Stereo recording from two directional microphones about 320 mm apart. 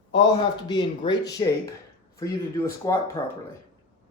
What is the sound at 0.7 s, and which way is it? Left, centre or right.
A man's voice, centre.